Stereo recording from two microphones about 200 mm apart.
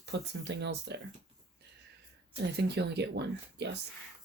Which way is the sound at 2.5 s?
55° right (ahead or behind).